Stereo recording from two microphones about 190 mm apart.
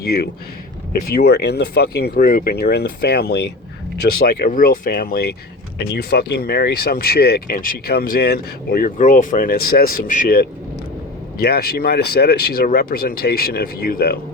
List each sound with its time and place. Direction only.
0.0 s speech: 55° left (ahead or behind)